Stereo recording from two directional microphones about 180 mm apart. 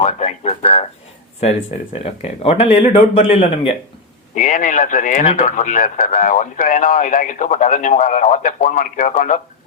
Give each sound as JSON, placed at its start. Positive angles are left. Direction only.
{"t": 0.0, "sound": "a sound", "side_deg": 40}
{"t": 2.0, "sound": "speech", "side_deg": 35}
{"t": 4.4, "sound": "speech", "side_deg": 45}